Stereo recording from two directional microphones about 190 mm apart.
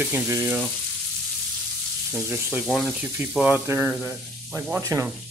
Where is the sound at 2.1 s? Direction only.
15° right (ahead or behind).